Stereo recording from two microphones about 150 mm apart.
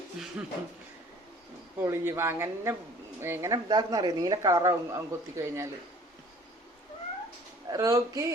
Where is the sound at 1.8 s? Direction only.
15° right (ahead or behind).